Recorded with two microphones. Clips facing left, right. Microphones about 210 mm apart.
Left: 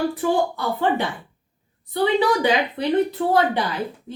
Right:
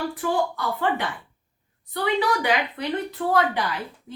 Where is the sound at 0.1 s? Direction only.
25° left (ahead or behind).